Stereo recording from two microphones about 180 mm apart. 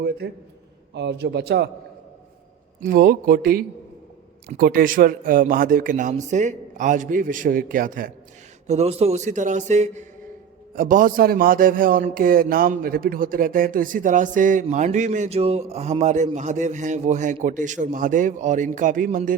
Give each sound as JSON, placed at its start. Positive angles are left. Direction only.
{"t": 0.2, "sound": "speech", "side_deg": -60}
{"t": 0.9, "sound": "a man's voice", "side_deg": -70}
{"t": 2.8, "sound": "a man's voice", "side_deg": -55}
{"t": 8.6, "sound": "a man's voice", "side_deg": -35}